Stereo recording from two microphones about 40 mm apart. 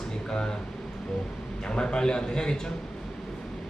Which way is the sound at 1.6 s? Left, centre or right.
Left.